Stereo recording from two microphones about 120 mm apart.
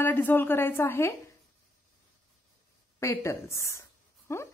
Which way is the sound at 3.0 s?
25° left (ahead or behind).